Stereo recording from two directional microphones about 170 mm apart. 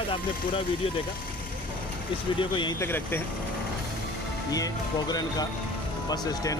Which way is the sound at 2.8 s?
15° left (ahead or behind).